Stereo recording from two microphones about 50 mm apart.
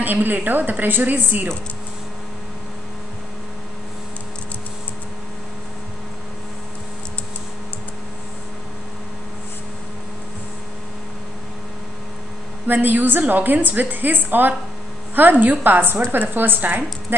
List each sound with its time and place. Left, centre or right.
0.0 s a woman's voice: right
12.6 s a woman's voice: right